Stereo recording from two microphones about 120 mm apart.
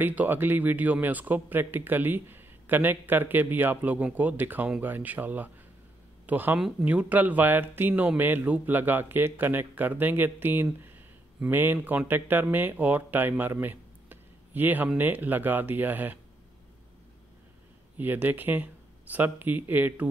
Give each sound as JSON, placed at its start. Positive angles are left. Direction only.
{"t": 0.0, "sound": "speech", "side_deg": -15}
{"t": 17.9, "sound": "speech", "side_deg": -15}